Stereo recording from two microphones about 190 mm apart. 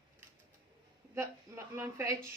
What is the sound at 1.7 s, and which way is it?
Speech, 15° right (ahead or behind).